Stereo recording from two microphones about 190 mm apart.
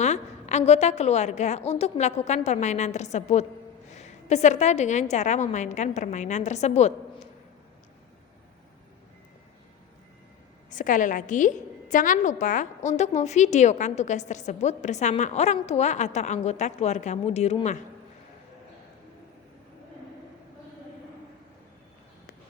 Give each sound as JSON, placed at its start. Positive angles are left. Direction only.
{"t": 0.0, "sound": "a woman's voice", "side_deg": 35}
{"t": 10.7, "sound": "a woman's voice", "side_deg": 40}